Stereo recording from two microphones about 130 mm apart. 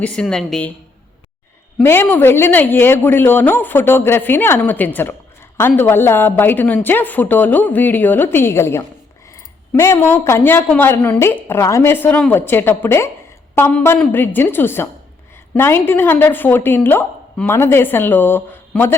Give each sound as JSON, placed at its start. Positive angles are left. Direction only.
{"t": 0.0, "sound": "a man's voice", "side_deg": 5}
{"t": 1.8, "sound": "a man's voice", "side_deg": 15}